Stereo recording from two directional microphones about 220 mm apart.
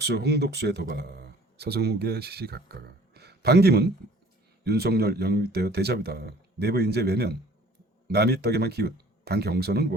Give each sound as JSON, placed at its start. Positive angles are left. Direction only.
{"t": 0.0, "sound": "speech", "side_deg": -50}